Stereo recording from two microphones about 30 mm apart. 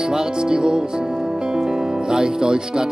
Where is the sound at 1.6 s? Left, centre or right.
Right.